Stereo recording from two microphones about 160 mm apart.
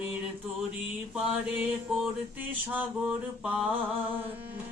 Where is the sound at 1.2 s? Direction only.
5° right (ahead or behind).